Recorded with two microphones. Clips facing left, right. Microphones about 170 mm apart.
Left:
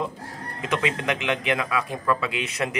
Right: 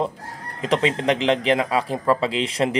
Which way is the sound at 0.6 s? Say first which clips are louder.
Right 5 dB; 30° right (ahead or behind).